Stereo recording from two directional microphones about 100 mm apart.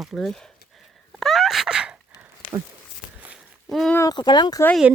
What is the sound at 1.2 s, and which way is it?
Sneeze, centre (ahead or behind).